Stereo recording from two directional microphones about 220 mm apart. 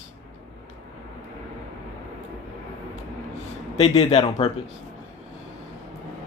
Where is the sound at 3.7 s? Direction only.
30° left (ahead or behind).